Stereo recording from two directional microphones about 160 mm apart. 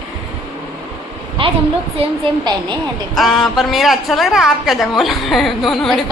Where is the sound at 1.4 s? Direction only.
35° right (ahead or behind).